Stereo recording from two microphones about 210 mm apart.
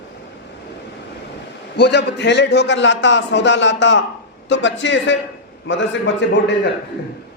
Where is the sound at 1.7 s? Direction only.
55° left (ahead or behind).